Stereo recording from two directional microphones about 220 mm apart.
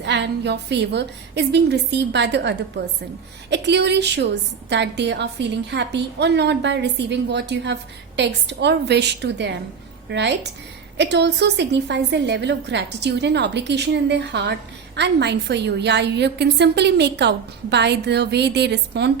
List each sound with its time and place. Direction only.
0.0 s a woman's voice: 50° right (ahead or behind)